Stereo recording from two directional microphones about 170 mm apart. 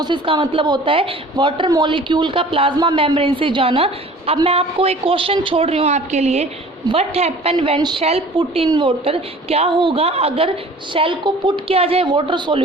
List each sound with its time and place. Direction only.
0.0 s a woman's voice: 30° right (ahead or behind)